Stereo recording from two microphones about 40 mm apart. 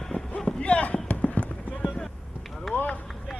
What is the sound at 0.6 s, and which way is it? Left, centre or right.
Basketball bounce, left.